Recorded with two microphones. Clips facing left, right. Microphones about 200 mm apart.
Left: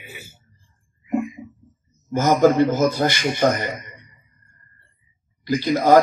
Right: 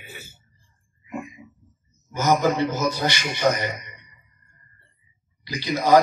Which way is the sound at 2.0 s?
50° left (ahead or behind).